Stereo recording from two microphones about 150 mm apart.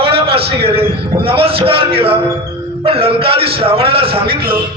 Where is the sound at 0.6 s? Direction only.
40° right (ahead or behind).